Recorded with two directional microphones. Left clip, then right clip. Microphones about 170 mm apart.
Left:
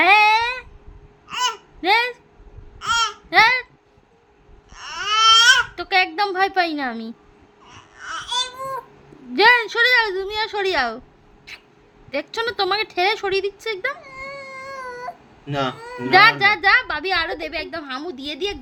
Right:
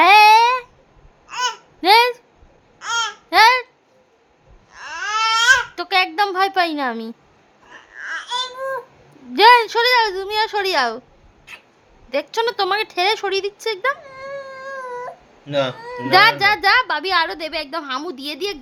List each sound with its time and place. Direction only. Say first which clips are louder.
0.0 s a sound: right 5 dB; 20° right (ahead or behind)
1.3 s babbling: even; 10° right (ahead or behind)
1.8 s a sound: right 5 dB; 25° right (ahead or behind)
2.7 s babbling: left 2 dB; 10° right (ahead or behind)
4.7 s baby cry: left 1 dB; 10° right (ahead or behind)
5.8 s a woman's voice: right 1 dB; 15° right (ahead or behind)
7.9 s baby cry: right 3 dB; centre (ahead or behind)
9.3 s a woman's voice: right 4 dB; 20° right (ahead or behind)
12.1 s a woman's voice: right 3 dB; 15° right (ahead or behind)
14.0 s baby cry: right 2 dB; 5° right (ahead or behind)
15.4 s a woman's voice: right 3 dB; 25° right (ahead or behind)